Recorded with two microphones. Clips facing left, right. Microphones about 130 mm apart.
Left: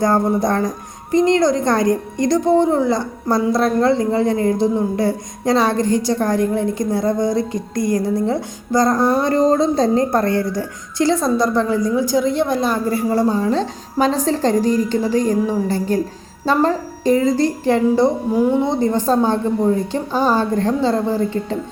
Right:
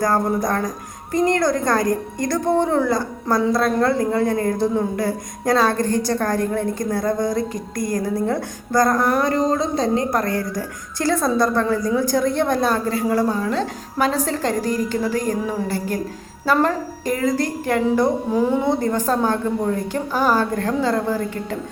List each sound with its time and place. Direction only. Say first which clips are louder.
0.0 s a woman's voice: left 3 dB; 25° left (ahead or behind)